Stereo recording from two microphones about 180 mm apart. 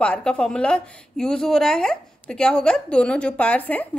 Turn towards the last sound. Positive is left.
turn(degrees=10)  # may be behind; listen again after turning